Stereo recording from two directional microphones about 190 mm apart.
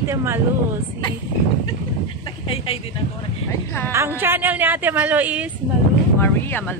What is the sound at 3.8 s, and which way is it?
A woman's voice, 15° right (ahead or behind).